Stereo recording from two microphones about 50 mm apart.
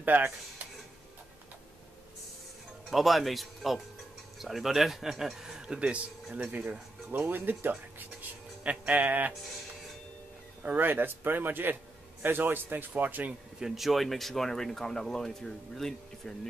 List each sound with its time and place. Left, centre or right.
0.0 s speech: right
2.9 s speech: centre; by 5.9 s right
6.3 s speech: right
7.1 s speech: right
8.2 s speech: right
10.6 s a man's voice: right
13.6 s speech: centre